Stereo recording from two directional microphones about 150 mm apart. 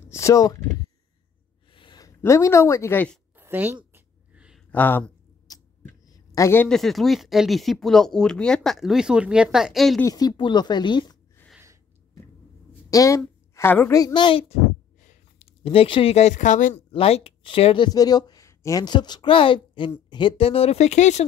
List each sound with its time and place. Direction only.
0.1 s speech: 20° left (ahead or behind)
1.7 s speech: 35° left (ahead or behind); by 3.2 s 15° left (ahead or behind)
3.3 s a sound: 15° right (ahead or behind)
4.6 s speech: 10° left (ahead or behind)
5.5 s a sound: 25° left (ahead or behind)
6.7 s speech: centre (ahead or behind)
10.0 s speech: 25° left (ahead or behind)
12.9 s a woman's voice: 20° left (ahead or behind)
15.0 s a sound: 55° left (ahead or behind)
15.6 s speech: 40° left (ahead or behind); by 16.8 s 55° left (ahead or behind)
16.9 s speech: 40° left (ahead or behind)